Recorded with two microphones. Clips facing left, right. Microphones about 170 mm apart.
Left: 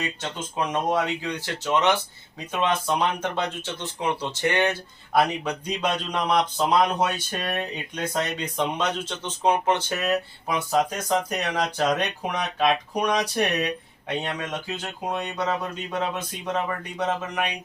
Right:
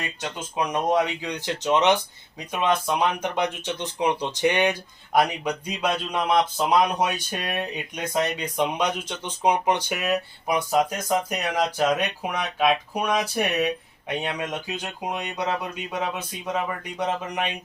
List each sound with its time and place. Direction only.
0.2 s speech: 10° right (ahead or behind)